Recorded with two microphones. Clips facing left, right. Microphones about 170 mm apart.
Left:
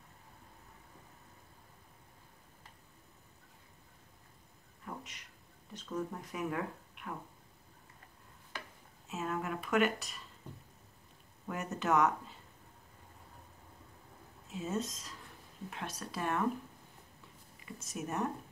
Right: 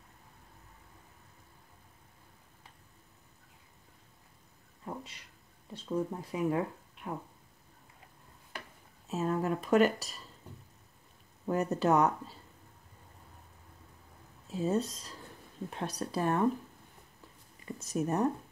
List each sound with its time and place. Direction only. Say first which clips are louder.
4.8 s a sound: right 4 dB; 30° right (ahead or behind)
5.7 s speech: right 5 dB; 30° right (ahead or behind)
9.1 s speech: right 6 dB; 35° right (ahead or behind)
11.4 s speech: right 7 dB; 35° right (ahead or behind)
14.5 s speech: right 6 dB; 35° right (ahead or behind)
17.6 s speech: right 8 dB; 35° right (ahead or behind)